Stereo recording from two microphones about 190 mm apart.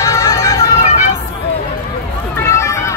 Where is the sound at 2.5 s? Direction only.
15° left (ahead or behind).